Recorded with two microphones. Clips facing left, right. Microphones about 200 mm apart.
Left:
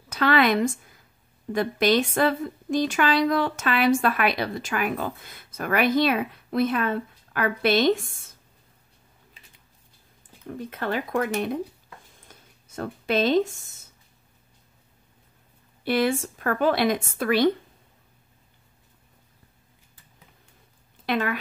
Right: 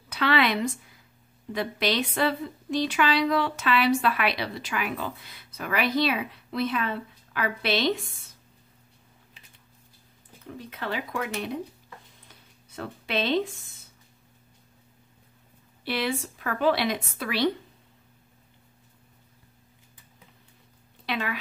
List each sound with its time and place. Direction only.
0.1 s a woman's voice: 45° left (ahead or behind)
10.6 s a woman's voice: 50° left (ahead or behind)
12.3 s a sound: 45° left (ahead or behind)
15.8 s a woman's voice: 45° left (ahead or behind)
21.0 s speech: 50° left (ahead or behind)